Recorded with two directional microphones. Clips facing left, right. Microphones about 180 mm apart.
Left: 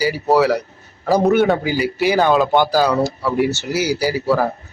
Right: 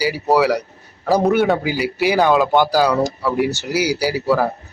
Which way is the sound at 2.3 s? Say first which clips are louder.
Even; centre (ahead or behind).